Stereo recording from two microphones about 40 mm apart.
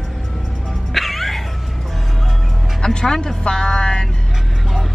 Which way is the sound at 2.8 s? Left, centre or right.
Centre.